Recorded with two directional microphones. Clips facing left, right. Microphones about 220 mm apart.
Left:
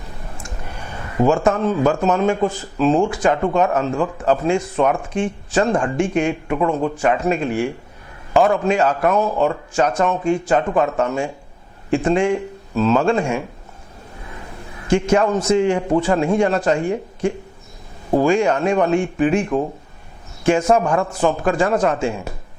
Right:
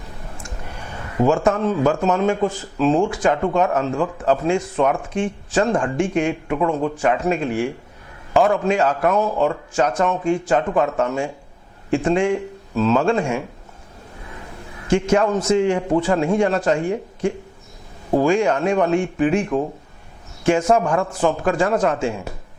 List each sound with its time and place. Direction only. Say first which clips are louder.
0.9 s speech: left 1 dB; 20° left (ahead or behind)
14.8 s speech: left 1 dB; 10° left (ahead or behind)
20.8 s speech: left 1 dB; 25° left (ahead or behind)